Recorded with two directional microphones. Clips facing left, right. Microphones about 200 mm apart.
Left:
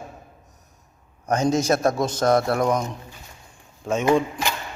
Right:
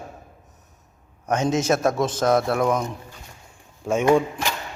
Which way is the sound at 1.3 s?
5° right (ahead or behind).